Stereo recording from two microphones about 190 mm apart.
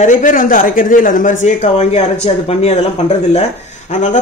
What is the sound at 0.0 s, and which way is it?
Speech, 45° left (ahead or behind).